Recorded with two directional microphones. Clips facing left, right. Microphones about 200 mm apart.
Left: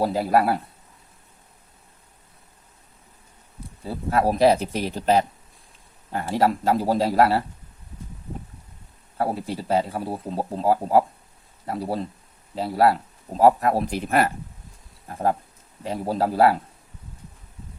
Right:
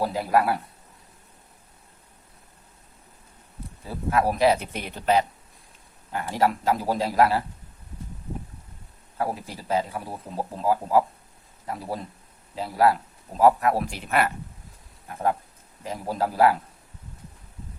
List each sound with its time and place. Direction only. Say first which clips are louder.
0.1 s speech: left 2 dB; 35° left (ahead or behind)
3.8 s speech: left 2 dB; 30° left (ahead or behind)
9.1 s speech: left 4 dB; 30° left (ahead or behind)